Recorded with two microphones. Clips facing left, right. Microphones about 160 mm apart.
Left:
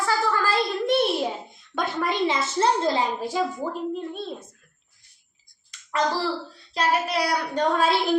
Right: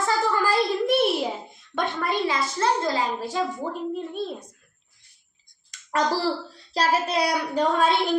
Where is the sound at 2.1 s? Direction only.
25° left (ahead or behind).